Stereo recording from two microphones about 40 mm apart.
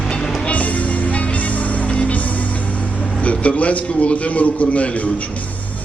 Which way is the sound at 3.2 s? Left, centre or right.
Left.